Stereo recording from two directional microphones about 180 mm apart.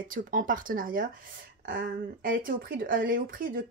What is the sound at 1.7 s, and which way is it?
Speech, 90° right.